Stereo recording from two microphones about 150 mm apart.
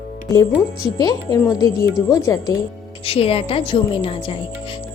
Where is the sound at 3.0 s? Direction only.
40° left (ahead or behind).